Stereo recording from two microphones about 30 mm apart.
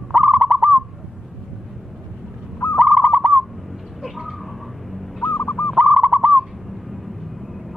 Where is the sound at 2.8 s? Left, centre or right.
Right.